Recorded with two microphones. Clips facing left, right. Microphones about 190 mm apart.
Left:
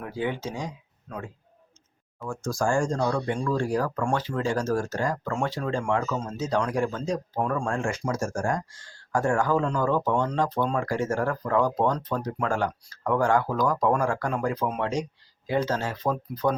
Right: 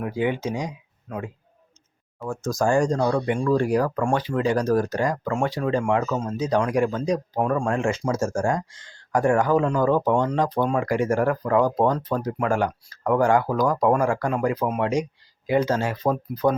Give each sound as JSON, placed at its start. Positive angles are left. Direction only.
{"t": 0.0, "sound": "speech", "side_deg": -15}